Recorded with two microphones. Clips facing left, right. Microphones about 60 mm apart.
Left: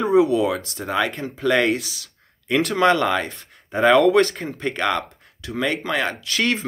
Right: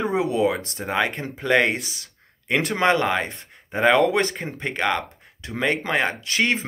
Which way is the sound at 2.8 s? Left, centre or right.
Right.